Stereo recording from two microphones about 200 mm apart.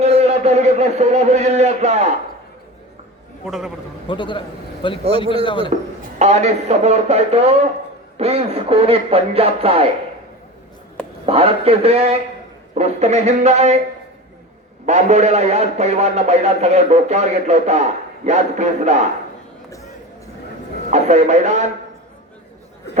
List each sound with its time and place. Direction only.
0.0 s a man's voice: 30° right (ahead or behind)
3.4 s a man's voice: centre (ahead or behind)
4.0 s a man's voice: 25° left (ahead or behind)
5.7 s a man's voice: 35° right (ahead or behind)
11.3 s a man's voice: 30° right (ahead or behind)
14.8 s a man's voice: 35° right (ahead or behind)
20.9 s speech: 35° right (ahead or behind)